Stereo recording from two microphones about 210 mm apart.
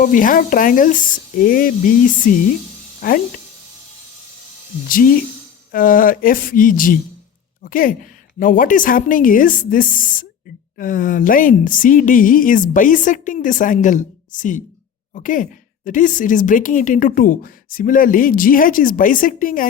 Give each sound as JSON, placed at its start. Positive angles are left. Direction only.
{"t": 0.0, "sound": "speech", "side_deg": 40}
{"t": 4.9, "sound": "speech", "side_deg": 40}